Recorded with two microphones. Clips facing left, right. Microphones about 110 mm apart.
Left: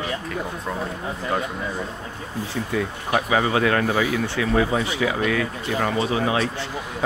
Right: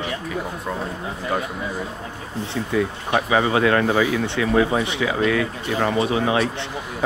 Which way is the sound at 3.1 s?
30° right (ahead or behind).